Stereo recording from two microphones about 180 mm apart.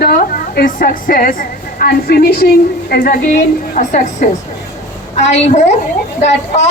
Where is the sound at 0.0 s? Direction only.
60° left (ahead or behind).